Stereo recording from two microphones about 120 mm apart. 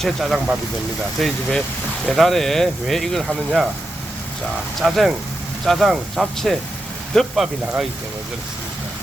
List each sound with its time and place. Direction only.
0.0 s speech: centre (ahead or behind)
4.8 s speech: centre (ahead or behind)